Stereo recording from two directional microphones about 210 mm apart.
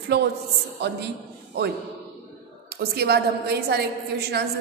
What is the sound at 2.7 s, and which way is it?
A woman's voice, 50° right (ahead or behind).